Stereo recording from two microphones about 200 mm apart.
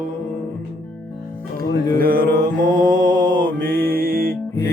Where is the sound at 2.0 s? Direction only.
45° right (ahead or behind).